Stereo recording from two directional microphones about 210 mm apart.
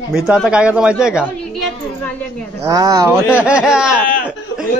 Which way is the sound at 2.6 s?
15° right (ahead or behind).